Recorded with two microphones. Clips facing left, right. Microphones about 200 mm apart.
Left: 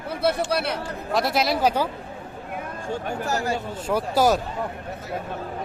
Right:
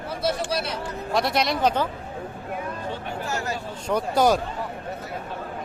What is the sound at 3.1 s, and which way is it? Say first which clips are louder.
Speech: left 5 dB; 40° left (ahead or behind).